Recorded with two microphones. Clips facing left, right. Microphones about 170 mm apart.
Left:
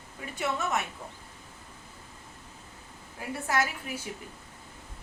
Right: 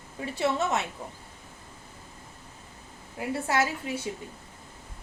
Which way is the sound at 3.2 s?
25° right (ahead or behind).